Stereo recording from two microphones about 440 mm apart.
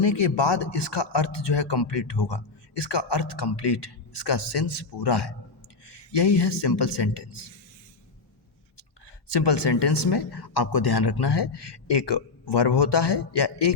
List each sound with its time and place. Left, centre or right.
0.0 s speech: left
9.3 s speech: left